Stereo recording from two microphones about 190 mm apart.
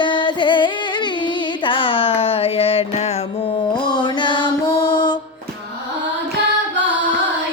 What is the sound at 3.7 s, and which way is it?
Music, 25° left (ahead or behind).